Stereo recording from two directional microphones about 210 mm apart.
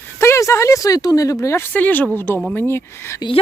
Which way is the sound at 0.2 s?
15° left (ahead or behind).